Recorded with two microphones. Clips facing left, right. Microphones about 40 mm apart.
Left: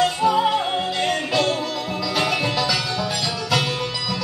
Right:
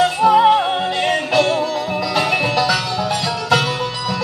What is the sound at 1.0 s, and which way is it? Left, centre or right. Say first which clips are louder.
Music: right 5 dB; right.